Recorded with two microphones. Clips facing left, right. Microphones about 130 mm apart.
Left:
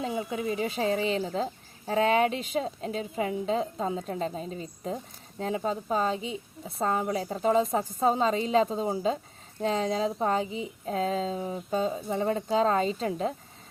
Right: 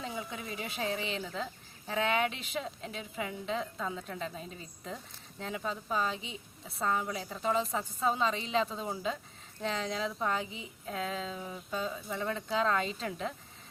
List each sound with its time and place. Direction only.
0.1 s a woman's voice: 25° left (ahead or behind)